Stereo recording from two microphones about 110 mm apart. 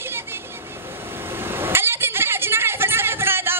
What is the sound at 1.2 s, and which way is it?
Vehicle, 20° right (ahead or behind).